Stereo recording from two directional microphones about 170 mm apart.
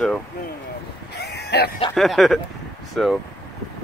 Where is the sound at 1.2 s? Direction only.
75° left (ahead or behind).